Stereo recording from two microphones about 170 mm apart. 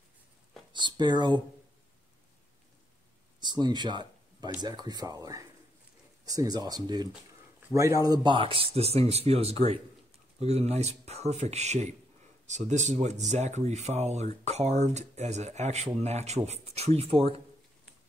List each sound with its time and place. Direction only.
0.7 s speech: 25° right (ahead or behind)
3.3 s speech: 25° right (ahead or behind)